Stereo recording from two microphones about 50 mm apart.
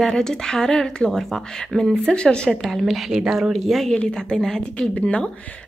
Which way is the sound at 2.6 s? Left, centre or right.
Centre.